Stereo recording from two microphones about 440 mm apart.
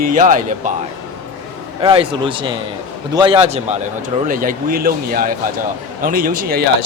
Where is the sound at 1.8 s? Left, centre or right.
Centre.